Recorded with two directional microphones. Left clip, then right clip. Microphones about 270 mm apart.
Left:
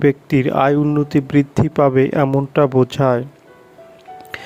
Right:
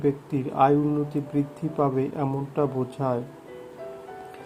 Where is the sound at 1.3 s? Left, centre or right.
Left.